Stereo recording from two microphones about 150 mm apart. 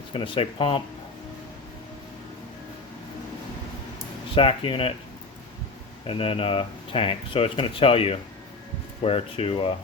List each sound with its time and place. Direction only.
0.1 s speech: 40° left (ahead or behind)
4.4 s speech: 35° left (ahead or behind)
6.1 s speech: 40° left (ahead or behind)